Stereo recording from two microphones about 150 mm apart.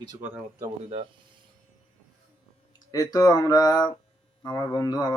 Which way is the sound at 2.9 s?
25° left (ahead or behind).